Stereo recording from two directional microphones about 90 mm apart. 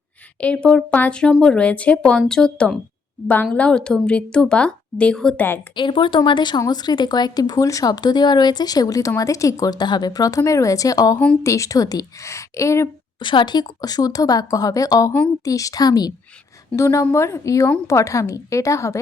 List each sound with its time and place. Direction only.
0.3 s speech: 15° left (ahead or behind)
5.7 s a woman's voice: 65° left (ahead or behind); by 12.9 s 35° left (ahead or behind)
13.1 s speech: 60° left (ahead or behind)
16.7 s a woman's voice: 35° left (ahead or behind)